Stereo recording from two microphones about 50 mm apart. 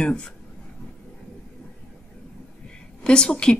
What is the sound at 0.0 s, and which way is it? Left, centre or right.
Speech, centre.